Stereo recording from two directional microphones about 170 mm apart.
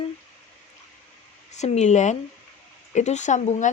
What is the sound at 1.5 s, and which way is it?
Speech, 40° left (ahead or behind).